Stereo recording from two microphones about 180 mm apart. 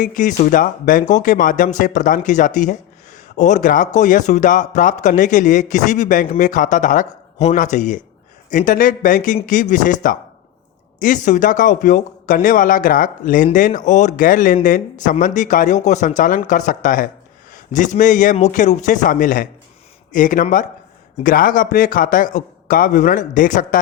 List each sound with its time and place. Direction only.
0.0 s speech: 45° left (ahead or behind)